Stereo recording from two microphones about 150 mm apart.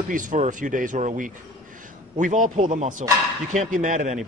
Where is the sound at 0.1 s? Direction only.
60° right (ahead or behind).